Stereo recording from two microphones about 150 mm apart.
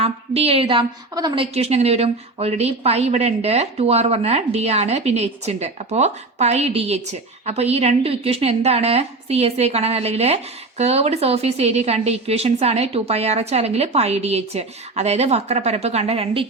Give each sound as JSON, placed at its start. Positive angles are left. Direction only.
{"t": 0.0, "sound": "a woman's voice", "side_deg": -40}
{"t": 1.5, "sound": "speech", "side_deg": -45}